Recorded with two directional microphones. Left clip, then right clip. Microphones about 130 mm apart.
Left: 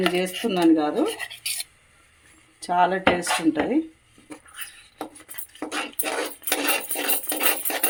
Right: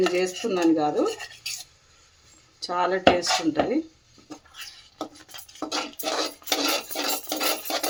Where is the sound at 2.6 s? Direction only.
40° left (ahead or behind).